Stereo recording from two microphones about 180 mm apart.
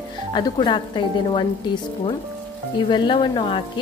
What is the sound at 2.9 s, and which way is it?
Speech, 25° left (ahead or behind).